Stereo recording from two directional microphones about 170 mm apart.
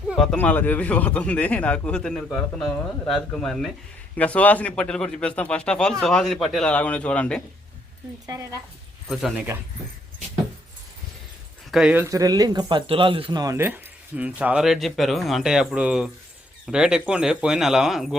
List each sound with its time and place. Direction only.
0.1 s speech: 5° left (ahead or behind)
8.3 s speech: 20° right (ahead or behind)
9.0 s speech: centre (ahead or behind)
11.7 s speech: 5° right (ahead or behind)